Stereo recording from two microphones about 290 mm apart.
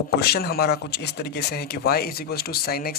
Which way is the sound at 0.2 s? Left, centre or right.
Left.